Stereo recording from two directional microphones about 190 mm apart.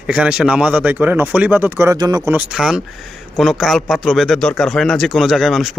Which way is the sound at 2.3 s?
5° right (ahead or behind).